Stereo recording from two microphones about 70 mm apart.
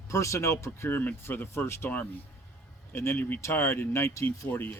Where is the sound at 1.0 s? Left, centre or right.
Left.